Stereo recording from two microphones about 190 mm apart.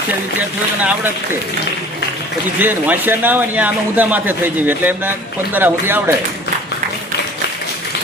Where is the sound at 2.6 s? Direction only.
10° right (ahead or behind).